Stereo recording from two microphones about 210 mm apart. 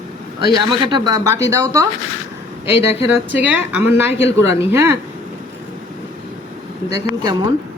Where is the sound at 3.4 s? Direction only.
10° right (ahead or behind).